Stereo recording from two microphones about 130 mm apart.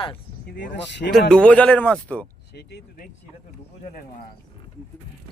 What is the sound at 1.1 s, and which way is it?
Speech, 5° left (ahead or behind).